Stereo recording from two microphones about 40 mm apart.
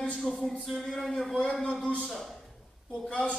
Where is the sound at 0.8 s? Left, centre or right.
Centre.